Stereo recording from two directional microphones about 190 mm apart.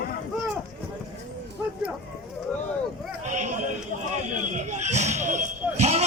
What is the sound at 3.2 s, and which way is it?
Speech, 40° right (ahead or behind).